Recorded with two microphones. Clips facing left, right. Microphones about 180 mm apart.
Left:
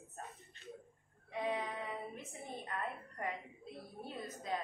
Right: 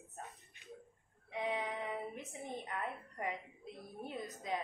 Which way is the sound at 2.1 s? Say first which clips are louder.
Right 2 dB; 20° right (ahead or behind).